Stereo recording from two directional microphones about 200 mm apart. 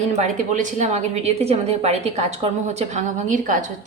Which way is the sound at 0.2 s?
40° right (ahead or behind).